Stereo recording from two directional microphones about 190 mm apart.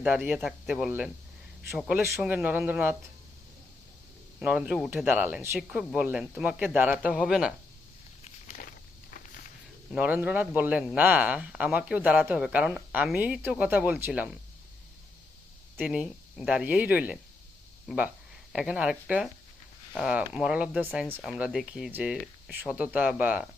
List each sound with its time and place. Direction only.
0.0 s a man's voice: 10° right (ahead or behind)
4.4 s a man's voice: 5° right (ahead or behind)
8.2 s a sound: 45° left (ahead or behind)
9.0 s walk: 50° left (ahead or behind)
9.9 s a man's voice: 10° right (ahead or behind)
15.8 s a man's voice: 5° right (ahead or behind)